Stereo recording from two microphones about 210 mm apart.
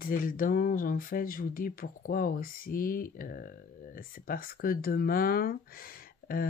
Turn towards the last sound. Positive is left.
turn(degrees=45)  # may be behind; listen again after turning